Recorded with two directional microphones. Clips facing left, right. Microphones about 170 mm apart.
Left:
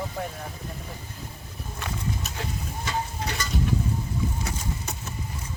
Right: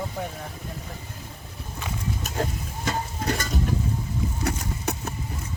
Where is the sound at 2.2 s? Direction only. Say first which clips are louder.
Right 5 dB; 50° right (ahead or behind).